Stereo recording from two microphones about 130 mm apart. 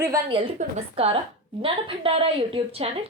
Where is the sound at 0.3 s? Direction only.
40° right (ahead or behind).